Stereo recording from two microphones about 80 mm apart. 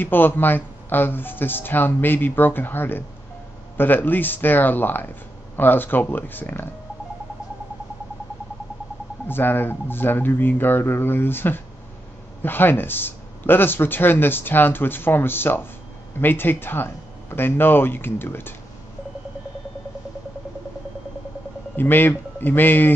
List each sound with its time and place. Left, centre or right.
0.0 s speech: left
9.3 s speech: left
21.7 s speech: left